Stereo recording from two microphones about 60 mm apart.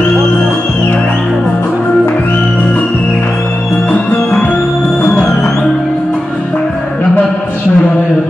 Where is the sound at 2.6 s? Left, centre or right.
Centre.